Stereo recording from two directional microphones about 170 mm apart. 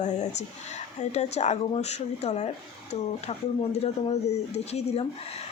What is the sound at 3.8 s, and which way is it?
Speech, 40° left (ahead or behind).